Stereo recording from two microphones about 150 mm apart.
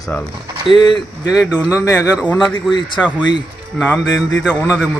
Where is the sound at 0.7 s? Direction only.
30° left (ahead or behind).